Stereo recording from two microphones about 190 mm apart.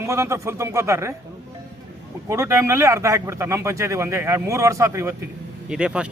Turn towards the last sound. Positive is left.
turn(degrees=-5)  # may be behind; listen again after turning